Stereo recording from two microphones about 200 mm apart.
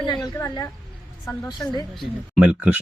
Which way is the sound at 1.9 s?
Centre (ahead or behind).